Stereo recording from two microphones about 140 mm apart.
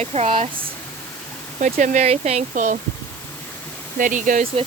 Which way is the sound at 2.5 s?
70° right (ahead or behind).